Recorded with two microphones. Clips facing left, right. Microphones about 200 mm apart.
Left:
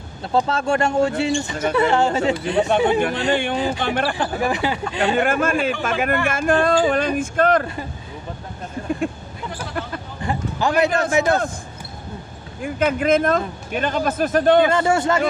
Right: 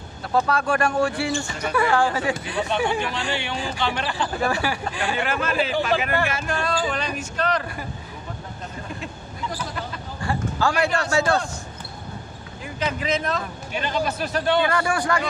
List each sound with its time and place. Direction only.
0.3 s speech: 25° left (ahead or behind)
3.3 s a man's voice: 50° left (ahead or behind)
4.4 s speech: 20° left (ahead or behind)
5.1 s a man's voice: 50° left (ahead or behind)
10.2 s speech: 20° left (ahead or behind)
12.6 s a man's voice: 50° left (ahead or behind)
14.7 s speech: 25° left (ahead or behind)